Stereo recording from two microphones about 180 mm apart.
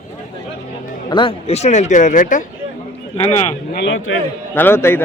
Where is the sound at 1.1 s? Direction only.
30° left (ahead or behind); by 2.4 s 45° left (ahead or behind).